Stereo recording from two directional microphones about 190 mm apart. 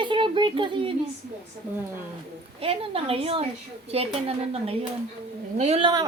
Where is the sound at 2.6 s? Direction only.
30° right (ahead or behind).